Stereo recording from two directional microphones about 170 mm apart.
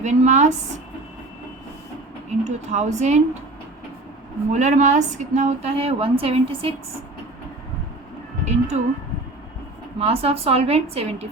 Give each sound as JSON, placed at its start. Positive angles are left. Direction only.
{"t": 0.0, "sound": "speech", "side_deg": -45}
{"t": 2.4, "sound": "speech", "side_deg": -45}
{"t": 4.5, "sound": "a woman's voice", "side_deg": -45}
{"t": 8.4, "sound": "a woman's voice", "side_deg": -40}
{"t": 10.0, "sound": "a woman's voice", "side_deg": -35}